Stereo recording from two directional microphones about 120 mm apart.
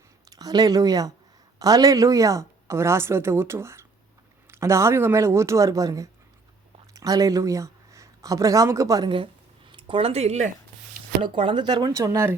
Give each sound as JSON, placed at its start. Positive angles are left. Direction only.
{"t": 0.3, "sound": "a woman's voice", "side_deg": -30}
{"t": 9.0, "sound": "speech", "side_deg": -45}
{"t": 11.2, "sound": "speech", "side_deg": -45}